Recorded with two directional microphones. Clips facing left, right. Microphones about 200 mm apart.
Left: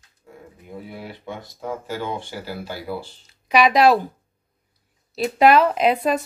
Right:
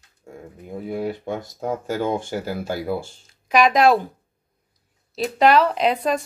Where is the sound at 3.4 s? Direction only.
5° left (ahead or behind).